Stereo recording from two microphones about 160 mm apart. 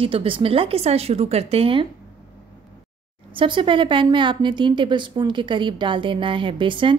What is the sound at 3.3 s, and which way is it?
A woman's voice, 30° right (ahead or behind).